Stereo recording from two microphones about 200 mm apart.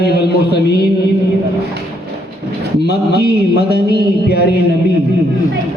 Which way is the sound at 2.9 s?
55° left (ahead or behind).